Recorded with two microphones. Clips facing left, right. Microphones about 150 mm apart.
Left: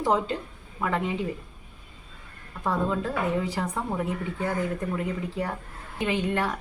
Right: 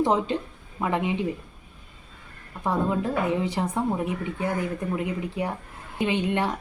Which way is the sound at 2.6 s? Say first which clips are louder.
Right 2 dB; 15° right (ahead or behind).